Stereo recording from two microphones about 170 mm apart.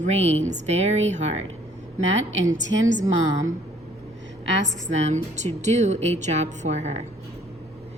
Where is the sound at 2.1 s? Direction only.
90° right.